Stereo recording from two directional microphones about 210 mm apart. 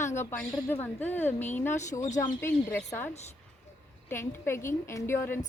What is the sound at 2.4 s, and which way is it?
Speech, 10° left (ahead or behind).